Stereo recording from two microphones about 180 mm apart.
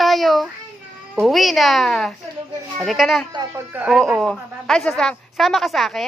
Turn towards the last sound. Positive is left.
turn(degrees=0)  # may be behind; listen again after turning